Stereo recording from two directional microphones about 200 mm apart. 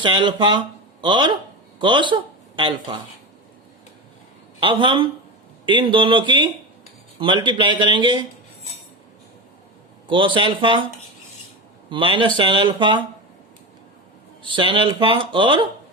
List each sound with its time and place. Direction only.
0.0 s speech: 25° right (ahead or behind)
4.6 s speech: 25° right (ahead or behind)
10.1 s speech: 25° right (ahead or behind)
11.9 s speech: 25° right (ahead or behind)
14.4 s speech: 25° right (ahead or behind)